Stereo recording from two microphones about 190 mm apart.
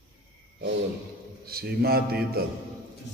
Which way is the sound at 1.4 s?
55° right (ahead or behind).